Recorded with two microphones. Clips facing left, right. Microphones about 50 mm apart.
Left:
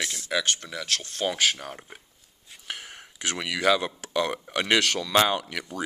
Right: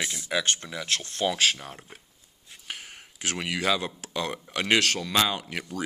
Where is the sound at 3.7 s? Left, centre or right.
Left.